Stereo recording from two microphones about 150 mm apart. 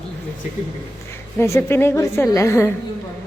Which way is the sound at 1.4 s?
15° left (ahead or behind).